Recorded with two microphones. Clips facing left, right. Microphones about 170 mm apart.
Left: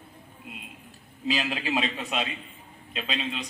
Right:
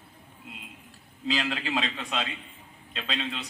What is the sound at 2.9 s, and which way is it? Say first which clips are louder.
Speech: left 2 dB; 10° left (ahead or behind).